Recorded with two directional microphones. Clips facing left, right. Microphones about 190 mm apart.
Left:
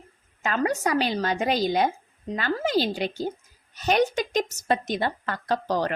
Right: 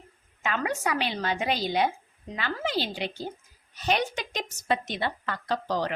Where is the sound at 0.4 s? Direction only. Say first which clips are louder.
Left 4 dB; 40° left (ahead or behind).